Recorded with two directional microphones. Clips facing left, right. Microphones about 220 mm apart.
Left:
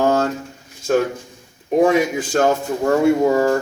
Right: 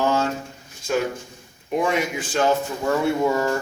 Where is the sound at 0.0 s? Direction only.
50° left (ahead or behind).